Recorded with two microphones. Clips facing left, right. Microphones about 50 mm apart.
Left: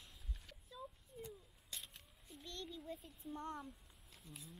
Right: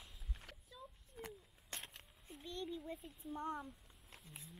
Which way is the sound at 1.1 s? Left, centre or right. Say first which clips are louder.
Right 2 dB; right.